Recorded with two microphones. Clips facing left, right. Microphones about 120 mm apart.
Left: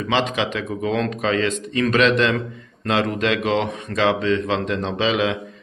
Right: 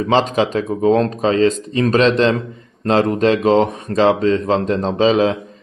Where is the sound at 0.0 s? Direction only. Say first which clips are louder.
Right 6 dB; 40° right (ahead or behind).